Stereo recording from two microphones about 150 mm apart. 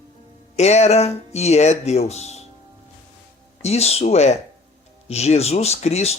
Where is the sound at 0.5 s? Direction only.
45° left (ahead or behind).